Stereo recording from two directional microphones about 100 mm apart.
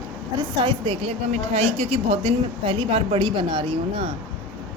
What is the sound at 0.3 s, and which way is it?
Speech, 55° right (ahead or behind).